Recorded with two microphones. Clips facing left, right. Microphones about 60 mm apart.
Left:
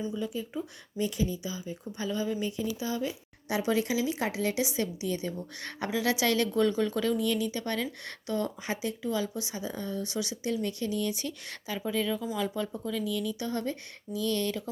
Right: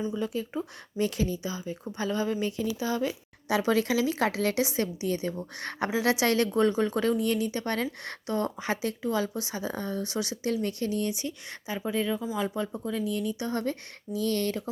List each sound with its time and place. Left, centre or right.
0.1 s speech: right
3.6 s a woman's voice: right
11.2 s a woman's voice: right